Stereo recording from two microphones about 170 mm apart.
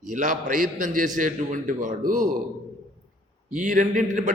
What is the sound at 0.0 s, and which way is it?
A man's voice, 45° right (ahead or behind).